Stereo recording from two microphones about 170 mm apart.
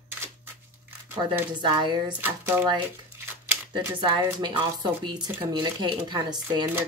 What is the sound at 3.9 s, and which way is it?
Speech, 30° right (ahead or behind).